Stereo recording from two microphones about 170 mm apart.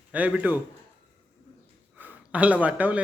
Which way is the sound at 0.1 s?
10° right (ahead or behind).